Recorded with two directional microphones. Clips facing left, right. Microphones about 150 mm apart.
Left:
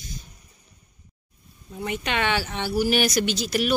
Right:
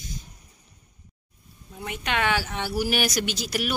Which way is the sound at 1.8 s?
Centre (ahead or behind).